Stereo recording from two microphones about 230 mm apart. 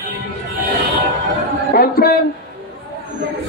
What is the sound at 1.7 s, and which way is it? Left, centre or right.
Speech, left.